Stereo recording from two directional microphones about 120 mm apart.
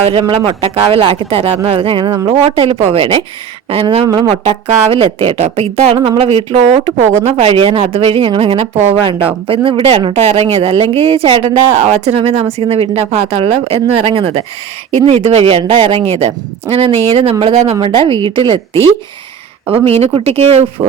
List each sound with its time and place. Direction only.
0.0 s speech: 50° right (ahead or behind)
4.4 s speech: 50° right (ahead or behind)
19.7 s speech: 55° right (ahead or behind)